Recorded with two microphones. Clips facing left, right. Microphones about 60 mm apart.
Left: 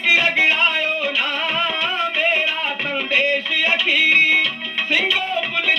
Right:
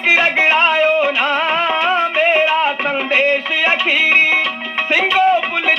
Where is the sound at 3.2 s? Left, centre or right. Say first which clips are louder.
Right 4 dB; right.